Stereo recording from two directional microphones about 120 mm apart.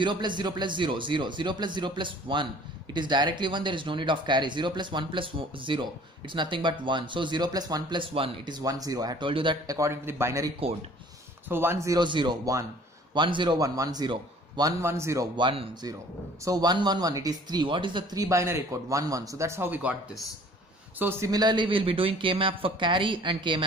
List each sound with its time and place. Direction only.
0.0 s speech: 40° right (ahead or behind)
8.0 s speech: 50° right (ahead or behind)
8.5 s speech: 30° right (ahead or behind)
9.3 s speech: 45° right (ahead or behind)
9.7 s speech: 25° right (ahead or behind)
12.0 s speech: 40° right (ahead or behind); by 15.2 s 25° right (ahead or behind)
15.3 s speech: 45° right (ahead or behind)
16.4 s speech: 35° right (ahead or behind)
18.2 s speech: 25° right (ahead or behind)
21.0 s speech: 20° right (ahead or behind)
21.3 s speech: 35° right (ahead or behind)